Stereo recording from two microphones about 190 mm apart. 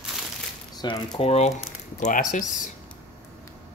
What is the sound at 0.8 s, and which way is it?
Speech, 20° left (ahead or behind).